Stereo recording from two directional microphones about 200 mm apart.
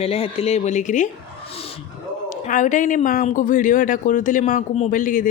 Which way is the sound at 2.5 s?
40° left (ahead or behind).